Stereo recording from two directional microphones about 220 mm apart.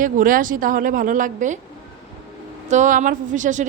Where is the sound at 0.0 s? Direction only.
40° right (ahead or behind).